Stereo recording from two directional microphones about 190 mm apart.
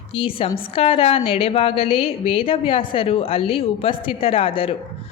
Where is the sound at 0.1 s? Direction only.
30° left (ahead or behind).